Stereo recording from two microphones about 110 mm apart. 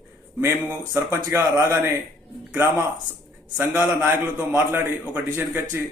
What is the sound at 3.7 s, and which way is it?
A man's voice, 15° right (ahead or behind).